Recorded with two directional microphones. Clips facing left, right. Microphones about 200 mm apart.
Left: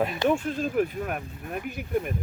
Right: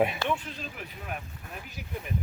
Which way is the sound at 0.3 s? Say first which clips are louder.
Left 8 dB; 45° left (ahead or behind).